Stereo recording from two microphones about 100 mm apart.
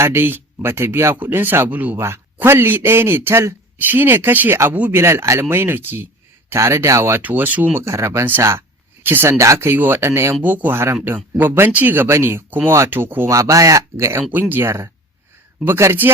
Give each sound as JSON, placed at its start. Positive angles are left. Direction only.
{"t": 0.0, "sound": "speech", "side_deg": -25}
{"t": 4.7, "sound": "speech", "side_deg": -15}
{"t": 4.9, "sound": "speech", "side_deg": -25}
{"t": 10.4, "sound": "speech", "side_deg": -15}
{"t": 13.3, "sound": "speech", "side_deg": -35}